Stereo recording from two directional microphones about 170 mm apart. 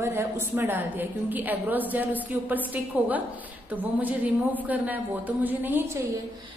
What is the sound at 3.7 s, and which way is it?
A woman's voice, 10° right (ahead or behind).